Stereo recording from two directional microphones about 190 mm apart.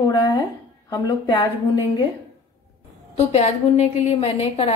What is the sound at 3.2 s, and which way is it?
A woman's voice, 35° left (ahead or behind).